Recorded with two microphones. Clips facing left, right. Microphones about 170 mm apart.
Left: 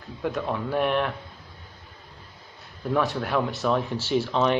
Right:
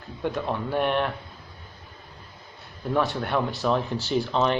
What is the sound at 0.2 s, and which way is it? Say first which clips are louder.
Speech: even; centre (ahead or behind).